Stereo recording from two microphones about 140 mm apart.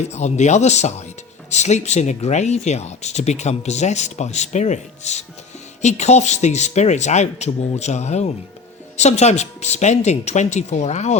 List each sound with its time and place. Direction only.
0.1 s speech: 55° left (ahead or behind)